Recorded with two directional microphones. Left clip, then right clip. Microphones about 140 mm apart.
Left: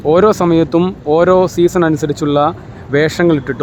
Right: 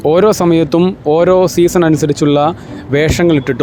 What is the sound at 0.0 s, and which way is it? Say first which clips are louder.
Speech: right 1 dB; 30° right (ahead or behind).